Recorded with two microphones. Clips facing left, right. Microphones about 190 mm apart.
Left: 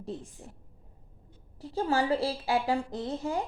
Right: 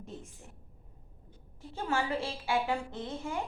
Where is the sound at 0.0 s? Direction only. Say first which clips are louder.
Left 7 dB; 35° left (ahead or behind).